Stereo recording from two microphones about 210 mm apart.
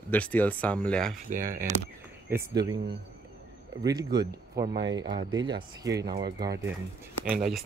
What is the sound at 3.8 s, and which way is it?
Speech, 20° right (ahead or behind).